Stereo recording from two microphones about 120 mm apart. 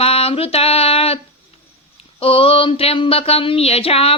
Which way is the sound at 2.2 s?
50° left (ahead or behind).